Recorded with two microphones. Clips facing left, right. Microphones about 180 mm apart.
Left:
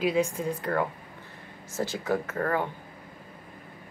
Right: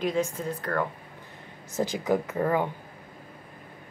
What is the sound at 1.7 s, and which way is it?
Speech, 15° right (ahead or behind).